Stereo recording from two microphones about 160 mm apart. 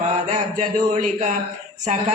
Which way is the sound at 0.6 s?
55° right (ahead or behind).